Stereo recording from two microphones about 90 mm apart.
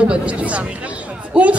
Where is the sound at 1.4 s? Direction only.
15° right (ahead or behind).